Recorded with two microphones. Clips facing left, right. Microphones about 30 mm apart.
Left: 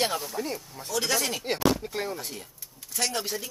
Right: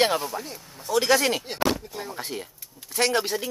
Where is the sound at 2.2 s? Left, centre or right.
Right.